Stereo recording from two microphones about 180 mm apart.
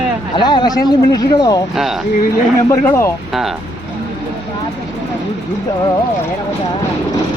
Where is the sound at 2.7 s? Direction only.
15° left (ahead or behind).